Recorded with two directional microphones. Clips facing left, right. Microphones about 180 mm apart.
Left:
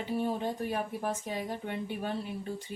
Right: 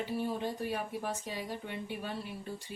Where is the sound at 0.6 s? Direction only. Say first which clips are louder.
Left 3 dB; 50° left (ahead or behind).